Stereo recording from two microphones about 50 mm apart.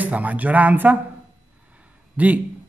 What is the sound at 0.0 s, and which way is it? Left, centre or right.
Speech, right.